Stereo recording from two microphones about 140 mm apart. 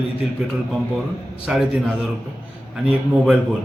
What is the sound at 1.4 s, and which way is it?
Speech, 5° right (ahead or behind).